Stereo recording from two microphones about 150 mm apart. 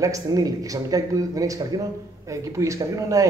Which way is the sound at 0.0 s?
20° right (ahead or behind).